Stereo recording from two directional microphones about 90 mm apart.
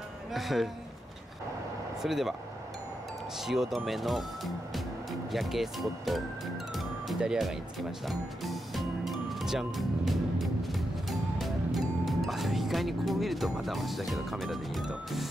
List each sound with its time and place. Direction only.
0.3 s speech: centre (ahead or behind)
2.0 s speech: 5° right (ahead or behind)
3.3 s speech: 5° right (ahead or behind)
5.3 s speech: centre (ahead or behind)
6.7 s music: centre (ahead or behind)